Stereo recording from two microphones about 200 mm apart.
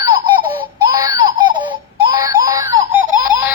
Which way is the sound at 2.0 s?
20° right (ahead or behind).